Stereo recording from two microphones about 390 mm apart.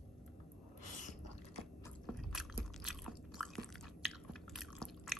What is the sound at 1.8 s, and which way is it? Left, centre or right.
Biting, centre.